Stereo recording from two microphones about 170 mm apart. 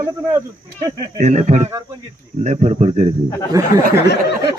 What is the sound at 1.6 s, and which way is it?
Speech, 15° right (ahead or behind).